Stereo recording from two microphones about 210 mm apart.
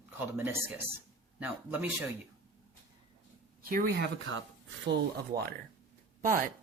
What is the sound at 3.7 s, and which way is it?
Speech, 50° right (ahead or behind).